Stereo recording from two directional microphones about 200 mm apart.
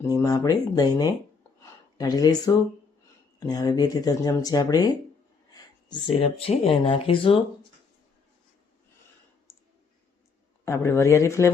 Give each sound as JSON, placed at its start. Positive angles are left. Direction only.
{"t": 0.0, "sound": "speech", "side_deg": 15}
{"t": 1.6, "sound": "a sound", "side_deg": 20}
{"t": 3.4, "sound": "speech", "side_deg": 20}
{"t": 9.5, "sound": "clicking", "side_deg": 15}
{"t": 10.7, "sound": "speech", "side_deg": 15}